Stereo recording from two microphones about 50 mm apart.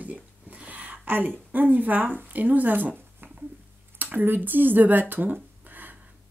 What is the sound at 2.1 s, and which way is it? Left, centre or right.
Speech, right.